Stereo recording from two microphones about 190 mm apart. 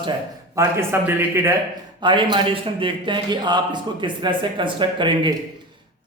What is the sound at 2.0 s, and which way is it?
A man's voice, 25° right (ahead or behind).